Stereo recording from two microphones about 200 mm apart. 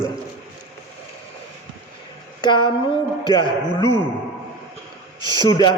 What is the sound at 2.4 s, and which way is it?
A man's voice, 25° left (ahead or behind).